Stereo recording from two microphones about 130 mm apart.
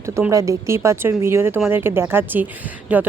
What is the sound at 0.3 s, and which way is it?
Speech, 25° right (ahead or behind).